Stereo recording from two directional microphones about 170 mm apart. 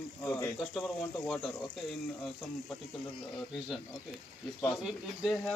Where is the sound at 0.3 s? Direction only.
15° left (ahead or behind).